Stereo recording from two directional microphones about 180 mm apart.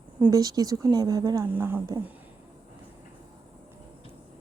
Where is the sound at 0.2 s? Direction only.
20° right (ahead or behind).